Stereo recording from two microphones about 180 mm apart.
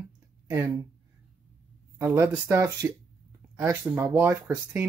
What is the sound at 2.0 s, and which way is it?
Speech, 15° right (ahead or behind).